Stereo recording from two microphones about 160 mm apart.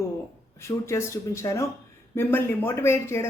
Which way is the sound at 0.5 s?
15° left (ahead or behind).